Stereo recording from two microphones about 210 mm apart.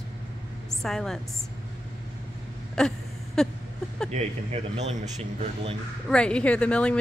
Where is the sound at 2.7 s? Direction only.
5° left (ahead or behind).